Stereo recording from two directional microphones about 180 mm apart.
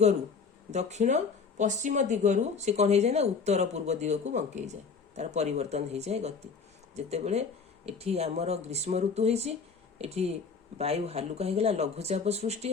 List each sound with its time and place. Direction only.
0.7 s speech: 40° right (ahead or behind)